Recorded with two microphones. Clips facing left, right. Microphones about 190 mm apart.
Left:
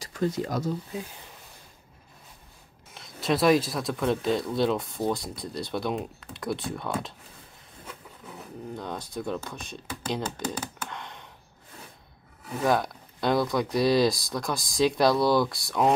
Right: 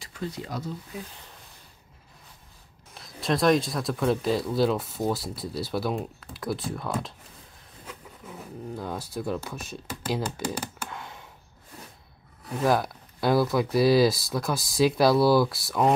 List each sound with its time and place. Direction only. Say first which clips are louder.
0.0 s speech: left 7 dB; 45° left (ahead or behind)
2.9 s speech: left 1 dB; centre (ahead or behind)
8.7 s speech: right 1 dB; 5° right (ahead or behind)
12.4 s speech: right 1 dB; centre (ahead or behind)